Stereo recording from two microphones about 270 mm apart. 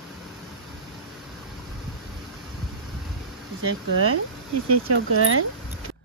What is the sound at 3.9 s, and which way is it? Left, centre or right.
Speech, right.